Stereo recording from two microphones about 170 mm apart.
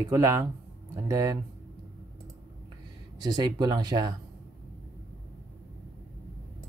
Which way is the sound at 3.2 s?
25° right (ahead or behind).